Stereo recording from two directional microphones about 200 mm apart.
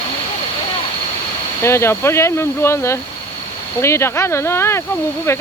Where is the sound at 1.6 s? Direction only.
15° left (ahead or behind).